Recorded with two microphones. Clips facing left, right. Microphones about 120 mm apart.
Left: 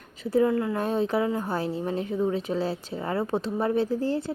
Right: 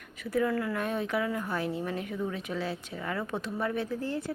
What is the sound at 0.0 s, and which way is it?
Speech, 30° left (ahead or behind).